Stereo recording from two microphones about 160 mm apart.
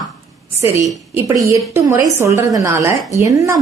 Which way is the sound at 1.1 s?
20° right (ahead or behind).